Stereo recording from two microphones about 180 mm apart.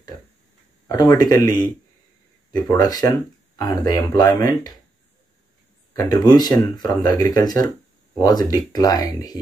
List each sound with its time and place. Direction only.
0.8 s speech: 20° left (ahead or behind)
2.7 s speech: 20° left (ahead or behind)
5.9 s speech: 20° left (ahead or behind)